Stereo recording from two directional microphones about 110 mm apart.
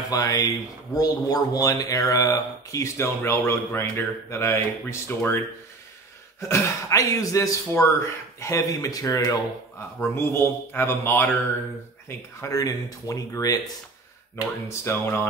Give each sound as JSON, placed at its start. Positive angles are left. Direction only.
{"t": 0.1, "sound": "speech", "side_deg": 35}
{"t": 6.5, "sound": "speech", "side_deg": 30}
{"t": 9.9, "sound": "speech", "side_deg": 20}
{"t": 12.4, "sound": "speech", "side_deg": 30}